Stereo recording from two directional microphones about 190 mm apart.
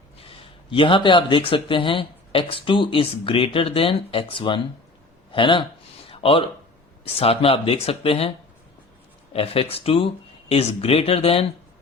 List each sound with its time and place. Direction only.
0.4 s speech: 25° left (ahead or behind)
6.1 s a sound: 30° left (ahead or behind)
7.0 s speech: 30° left (ahead or behind)
9.3 s speech: 30° left (ahead or behind)